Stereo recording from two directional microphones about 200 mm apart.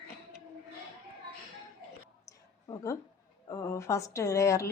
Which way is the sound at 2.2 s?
15° left (ahead or behind).